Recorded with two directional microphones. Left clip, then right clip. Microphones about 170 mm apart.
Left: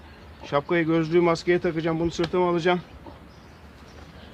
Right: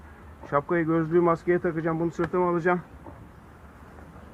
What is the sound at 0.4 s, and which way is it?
Speech, 55° left (ahead or behind).